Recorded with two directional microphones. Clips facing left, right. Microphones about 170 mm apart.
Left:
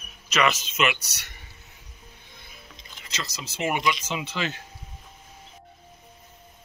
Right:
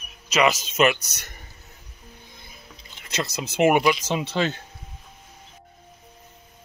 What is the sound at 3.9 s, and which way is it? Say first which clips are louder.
Speech: right 5 dB; 35° right (ahead or behind).